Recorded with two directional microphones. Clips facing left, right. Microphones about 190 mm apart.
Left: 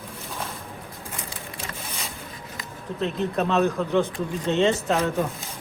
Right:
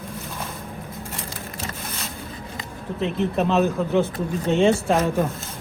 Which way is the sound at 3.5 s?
5° right (ahead or behind).